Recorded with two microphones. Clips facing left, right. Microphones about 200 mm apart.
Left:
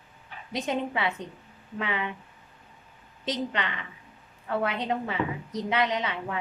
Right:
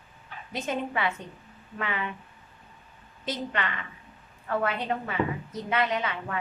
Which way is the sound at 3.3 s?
20° left (ahead or behind).